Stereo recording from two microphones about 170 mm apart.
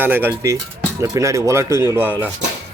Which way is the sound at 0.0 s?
10° right (ahead or behind).